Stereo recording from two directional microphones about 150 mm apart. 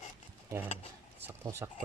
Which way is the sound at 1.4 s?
15° right (ahead or behind).